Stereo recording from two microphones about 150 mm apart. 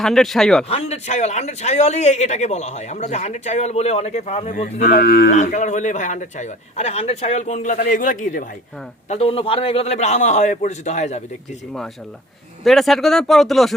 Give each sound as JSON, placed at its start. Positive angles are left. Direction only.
{"t": 0.0, "sound": "speech", "side_deg": 0}
{"t": 0.7, "sound": "a man's voice", "side_deg": 45}
{"t": 4.5, "sound": "speech", "side_deg": 70}
{"t": 5.3, "sound": "a man's voice", "side_deg": 55}
{"t": 9.0, "sound": "a man's voice", "side_deg": 45}
{"t": 12.6, "sound": "speech", "side_deg": 0}